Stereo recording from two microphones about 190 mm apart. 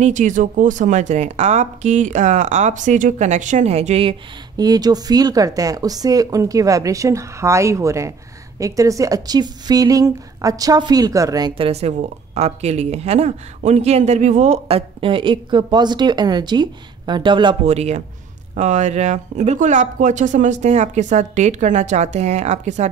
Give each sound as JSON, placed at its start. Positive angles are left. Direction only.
{"t": 0.0, "sound": "a woman's voice", "side_deg": -40}